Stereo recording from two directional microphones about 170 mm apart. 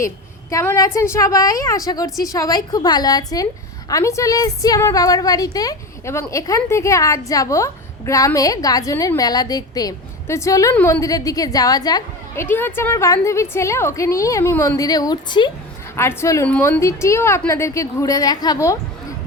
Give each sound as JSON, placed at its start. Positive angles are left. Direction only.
{"t": 0.5, "sound": "a woman's voice", "side_deg": 15}
{"t": 12.5, "sound": "a woman's voice", "side_deg": 10}